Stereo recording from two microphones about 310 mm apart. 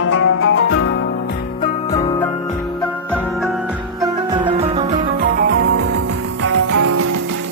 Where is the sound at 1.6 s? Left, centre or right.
Centre.